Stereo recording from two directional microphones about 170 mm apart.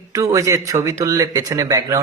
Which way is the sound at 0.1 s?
20° right (ahead or behind).